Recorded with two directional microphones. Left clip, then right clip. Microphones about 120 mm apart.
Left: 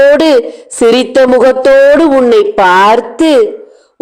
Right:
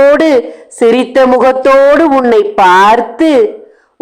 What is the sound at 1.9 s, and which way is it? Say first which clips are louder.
A man's voice: left 1 dB; 5° left (ahead or behind).